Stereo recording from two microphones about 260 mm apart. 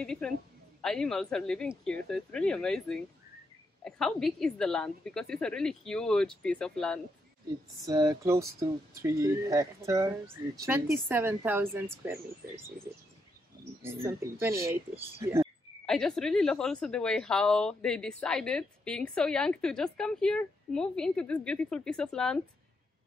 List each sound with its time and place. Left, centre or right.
0.0 s a woman's voice: centre
7.8 s speech: centre
14.0 s speech: centre
15.8 s a woman's voice: centre